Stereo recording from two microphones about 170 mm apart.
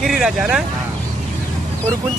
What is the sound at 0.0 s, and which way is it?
Speech, 5° right (ahead or behind).